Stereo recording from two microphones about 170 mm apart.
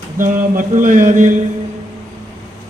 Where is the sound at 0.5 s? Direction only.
50° right (ahead or behind).